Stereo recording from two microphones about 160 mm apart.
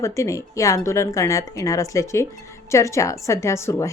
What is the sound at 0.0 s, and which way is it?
A woman's voice, 20° left (ahead or behind).